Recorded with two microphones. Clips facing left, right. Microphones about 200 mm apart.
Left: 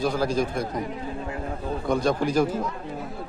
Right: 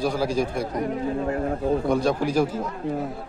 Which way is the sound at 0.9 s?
45° right (ahead or behind).